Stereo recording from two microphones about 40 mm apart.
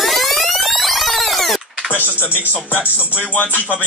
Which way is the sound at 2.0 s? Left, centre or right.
Left.